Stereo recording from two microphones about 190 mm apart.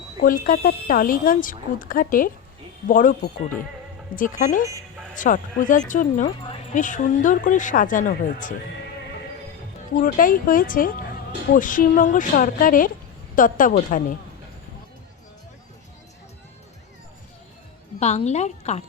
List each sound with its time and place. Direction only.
0.2 s speech: 45° left (ahead or behind)
9.9 s speech: 45° left (ahead or behind)
18.0 s a woman's voice: 35° left (ahead or behind)